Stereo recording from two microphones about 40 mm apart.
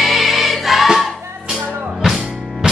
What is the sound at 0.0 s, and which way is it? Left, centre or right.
Music, centre.